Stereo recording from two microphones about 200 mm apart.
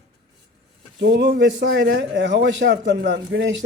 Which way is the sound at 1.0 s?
65° right (ahead or behind).